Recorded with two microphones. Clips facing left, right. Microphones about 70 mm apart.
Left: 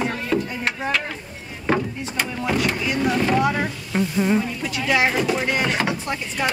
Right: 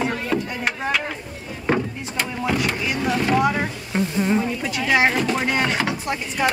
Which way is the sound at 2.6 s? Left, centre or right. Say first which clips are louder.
Left 2 dB; centre.